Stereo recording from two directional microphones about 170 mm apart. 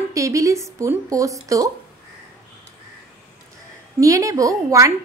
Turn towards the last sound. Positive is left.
turn(degrees=-20)  # may be behind; listen again after turning